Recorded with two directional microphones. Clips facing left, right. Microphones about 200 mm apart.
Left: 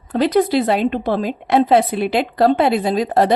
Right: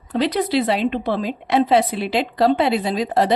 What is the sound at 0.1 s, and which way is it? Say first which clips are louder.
A woman's voice: left 4 dB; 50° left (ahead or behind).